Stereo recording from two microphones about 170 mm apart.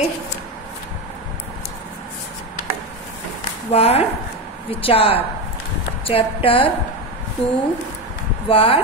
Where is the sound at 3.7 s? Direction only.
35° left (ahead or behind).